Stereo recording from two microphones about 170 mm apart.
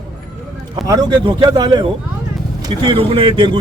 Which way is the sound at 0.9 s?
25° right (ahead or behind).